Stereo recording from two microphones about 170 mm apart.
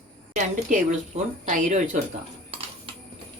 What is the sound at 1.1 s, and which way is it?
Speech, 50° right (ahead or behind).